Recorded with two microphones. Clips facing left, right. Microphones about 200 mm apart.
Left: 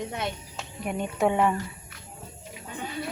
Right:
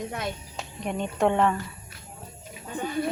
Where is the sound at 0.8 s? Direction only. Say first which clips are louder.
Right 1 dB; 5° left (ahead or behind).